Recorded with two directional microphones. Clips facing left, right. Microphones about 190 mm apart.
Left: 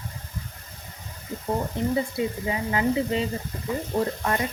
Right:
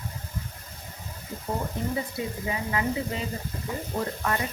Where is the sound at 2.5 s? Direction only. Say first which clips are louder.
Left 2 dB; 30° left (ahead or behind).